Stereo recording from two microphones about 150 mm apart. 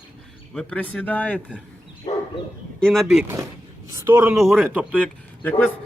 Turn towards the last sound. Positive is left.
turn(degrees=15)  # may be behind; listen again after turning